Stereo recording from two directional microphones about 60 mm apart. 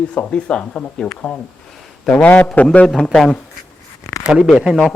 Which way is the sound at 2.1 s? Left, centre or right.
Centre.